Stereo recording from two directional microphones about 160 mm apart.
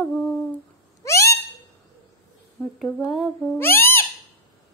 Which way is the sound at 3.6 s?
15° left (ahead or behind).